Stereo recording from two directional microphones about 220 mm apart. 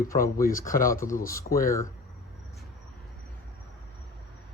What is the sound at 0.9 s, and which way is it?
Speech, 15° left (ahead or behind).